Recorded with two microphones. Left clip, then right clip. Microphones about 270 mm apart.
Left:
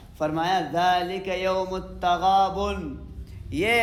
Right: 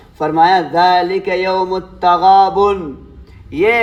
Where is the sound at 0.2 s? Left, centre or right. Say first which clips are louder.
Right 13 dB; centre.